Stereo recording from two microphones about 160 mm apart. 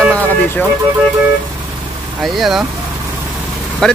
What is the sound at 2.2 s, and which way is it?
Speech, centre (ahead or behind).